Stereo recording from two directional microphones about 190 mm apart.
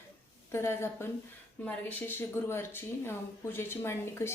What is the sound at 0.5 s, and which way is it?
Speech, 15° left (ahead or behind).